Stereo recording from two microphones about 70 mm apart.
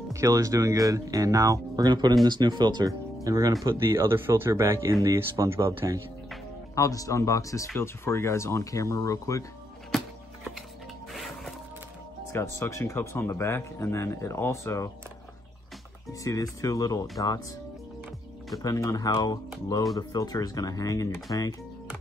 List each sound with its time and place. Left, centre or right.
0.1 s speech: right
3.3 s speech: right
3.8 s speech: right
6.7 s speech: left
12.3 s speech: left
16.1 s speech: left
18.6 s speech: left